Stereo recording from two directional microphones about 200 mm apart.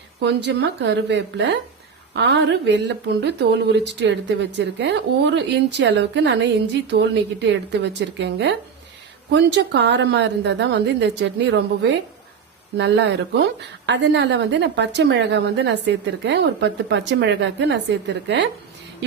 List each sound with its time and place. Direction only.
0.2 s a woman's voice: 60° right (ahead or behind)